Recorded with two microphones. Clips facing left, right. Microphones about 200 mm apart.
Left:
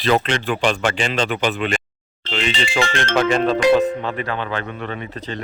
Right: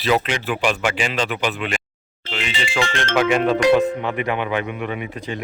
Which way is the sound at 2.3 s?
10° right (ahead or behind).